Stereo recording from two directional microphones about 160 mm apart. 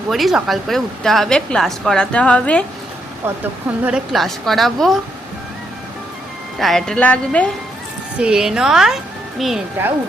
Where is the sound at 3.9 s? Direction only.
5° right (ahead or behind).